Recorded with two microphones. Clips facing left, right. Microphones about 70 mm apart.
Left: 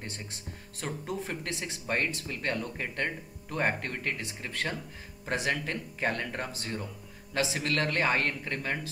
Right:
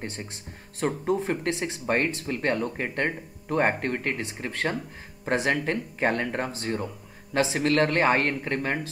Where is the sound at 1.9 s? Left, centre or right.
Right.